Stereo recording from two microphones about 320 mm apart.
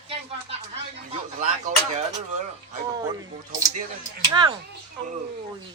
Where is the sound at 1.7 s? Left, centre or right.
Right.